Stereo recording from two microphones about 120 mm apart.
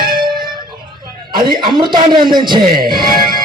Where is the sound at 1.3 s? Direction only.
35° right (ahead or behind).